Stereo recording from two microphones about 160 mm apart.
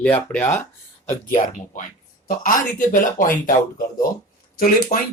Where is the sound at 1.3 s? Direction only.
50° left (ahead or behind).